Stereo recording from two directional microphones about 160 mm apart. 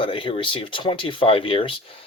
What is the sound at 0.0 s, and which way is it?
Speech, 30° left (ahead or behind).